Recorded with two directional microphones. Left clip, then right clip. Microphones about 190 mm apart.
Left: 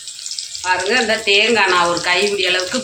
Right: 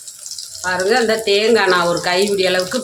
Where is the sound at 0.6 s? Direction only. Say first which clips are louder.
Right 1 dB; 45° right (ahead or behind).